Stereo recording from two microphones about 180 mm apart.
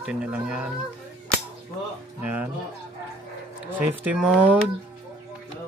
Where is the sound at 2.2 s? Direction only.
10° right (ahead or behind).